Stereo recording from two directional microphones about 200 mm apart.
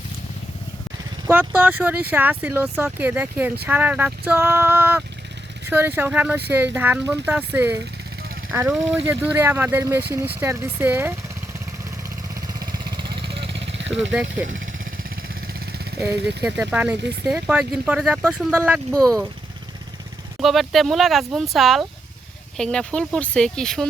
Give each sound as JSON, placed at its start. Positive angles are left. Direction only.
{"t": 1.3, "sound": "speech", "side_deg": -10}
{"t": 12.5, "sound": "vehicle", "side_deg": -20}
{"t": 14.1, "sound": "speech", "side_deg": -5}
{"t": 16.0, "sound": "speech", "side_deg": -5}
{"t": 20.4, "sound": "speech", "side_deg": 0}